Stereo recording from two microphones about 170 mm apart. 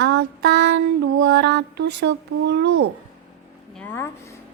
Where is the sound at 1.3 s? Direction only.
80° right.